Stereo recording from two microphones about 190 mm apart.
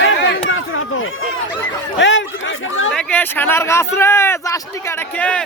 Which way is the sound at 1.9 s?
75° left (ahead or behind).